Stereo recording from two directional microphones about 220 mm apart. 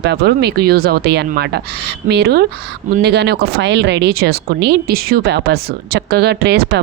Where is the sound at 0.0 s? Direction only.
50° right (ahead or behind).